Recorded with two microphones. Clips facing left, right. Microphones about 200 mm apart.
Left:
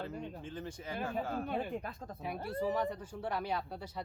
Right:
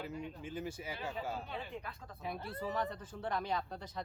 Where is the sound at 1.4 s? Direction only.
50° left (ahead or behind).